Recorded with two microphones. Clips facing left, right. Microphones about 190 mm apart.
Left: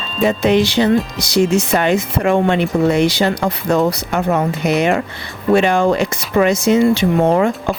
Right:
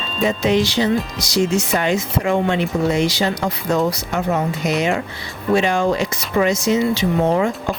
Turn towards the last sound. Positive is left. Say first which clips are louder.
# left 4 dB
turn(degrees=60)  # may be behind; listen again after turning